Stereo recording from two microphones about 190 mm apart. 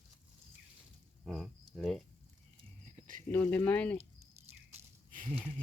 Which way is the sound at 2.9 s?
45° right (ahead or behind).